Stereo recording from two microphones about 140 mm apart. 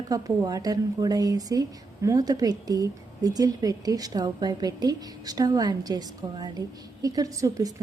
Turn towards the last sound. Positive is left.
turn(degrees=-25)  # may be behind; listen again after turning